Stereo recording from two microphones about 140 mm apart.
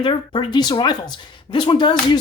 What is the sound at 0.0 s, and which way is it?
Speech, 35° left (ahead or behind).